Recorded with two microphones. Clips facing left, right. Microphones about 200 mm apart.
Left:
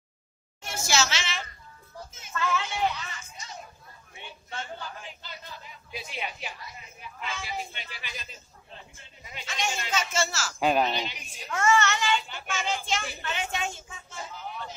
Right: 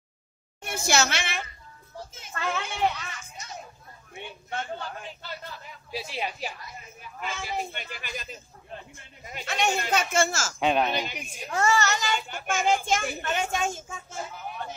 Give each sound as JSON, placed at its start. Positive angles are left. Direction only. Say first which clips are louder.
{"t": 0.6, "sound": "a woman's voice", "louder": "right 3 dB", "side_deg": -55}
{"t": 4.1, "sound": "a sound", "louder": "right 6 dB", "side_deg": -55}
{"t": 5.9, "sound": "a woman's voice", "louder": "right 4 dB", "side_deg": -35}
{"t": 7.2, "sound": "a child's voice", "louder": "right 3 dB", "side_deg": -50}
{"t": 10.6, "sound": "speech", "louder": "even", "side_deg": 0}
{"t": 11.0, "sound": "a child's voice", "louder": "right 3 dB", "side_deg": -50}
{"t": 11.5, "sound": "a child's voice", "louder": "even", "side_deg": -35}